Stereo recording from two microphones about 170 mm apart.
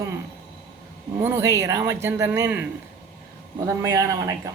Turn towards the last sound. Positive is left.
turn(degrees=-15)  # may be behind; listen again after turning